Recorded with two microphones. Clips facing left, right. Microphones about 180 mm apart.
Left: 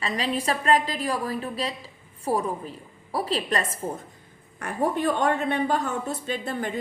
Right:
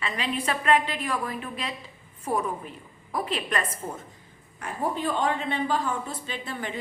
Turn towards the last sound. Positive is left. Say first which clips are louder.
# left 5 dB
turn(degrees=45)  # may be behind; listen again after turning